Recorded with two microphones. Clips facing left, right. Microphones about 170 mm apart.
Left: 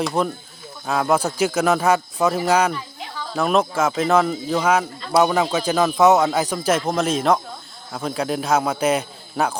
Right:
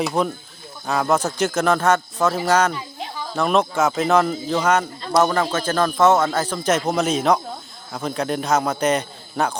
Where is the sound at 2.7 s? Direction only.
15° right (ahead or behind).